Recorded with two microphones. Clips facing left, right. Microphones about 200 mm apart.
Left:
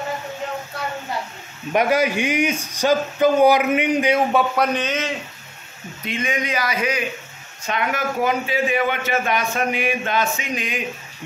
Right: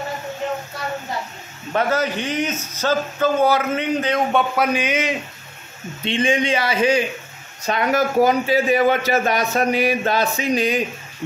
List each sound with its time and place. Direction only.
1.7 s speech: 15° left (ahead or behind)
4.3 s a man's voice: centre (ahead or behind)
4.7 s speech: 10° right (ahead or behind)
6.0 s a man's voice: 30° right (ahead or behind)